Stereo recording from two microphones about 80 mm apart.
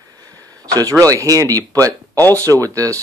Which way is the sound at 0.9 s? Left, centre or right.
Right.